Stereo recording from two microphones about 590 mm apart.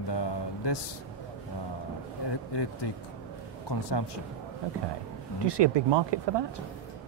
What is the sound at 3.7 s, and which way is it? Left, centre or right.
Speech, left.